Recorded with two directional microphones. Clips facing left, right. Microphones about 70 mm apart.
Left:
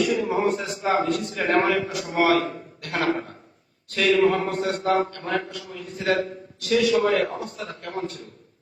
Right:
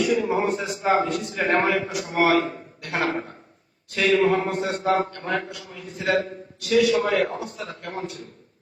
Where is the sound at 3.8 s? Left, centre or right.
Centre.